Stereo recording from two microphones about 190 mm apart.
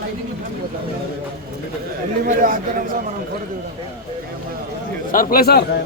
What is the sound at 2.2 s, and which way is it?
Speech, 45° right (ahead or behind).